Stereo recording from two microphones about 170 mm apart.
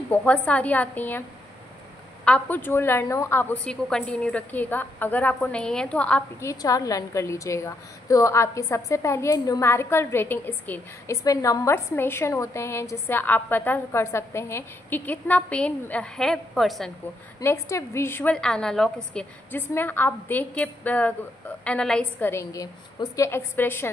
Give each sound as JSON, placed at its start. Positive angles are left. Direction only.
{"t": 0.1, "sound": "a woman's voice", "side_deg": 10}
{"t": 2.2, "sound": "a woman's voice", "side_deg": 5}
{"t": 6.4, "sound": "a woman's voice", "side_deg": 20}
{"t": 17.4, "sound": "a woman's voice", "side_deg": 15}
{"t": 22.3, "sound": "a woman's voice", "side_deg": 20}